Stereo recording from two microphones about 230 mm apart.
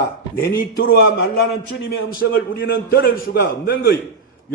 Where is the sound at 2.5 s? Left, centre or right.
Left.